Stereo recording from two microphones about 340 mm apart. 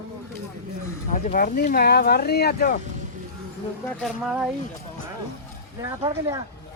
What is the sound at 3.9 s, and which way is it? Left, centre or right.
Speech, centre.